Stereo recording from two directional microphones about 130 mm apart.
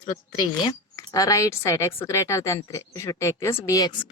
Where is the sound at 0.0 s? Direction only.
35° left (ahead or behind).